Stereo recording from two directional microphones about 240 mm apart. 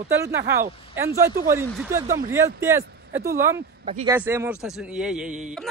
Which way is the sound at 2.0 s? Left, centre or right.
Right.